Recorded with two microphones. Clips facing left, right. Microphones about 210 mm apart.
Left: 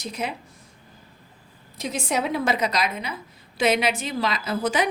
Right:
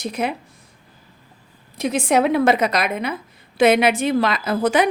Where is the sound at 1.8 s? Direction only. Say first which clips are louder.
Right 8 dB; 60° right (ahead or behind).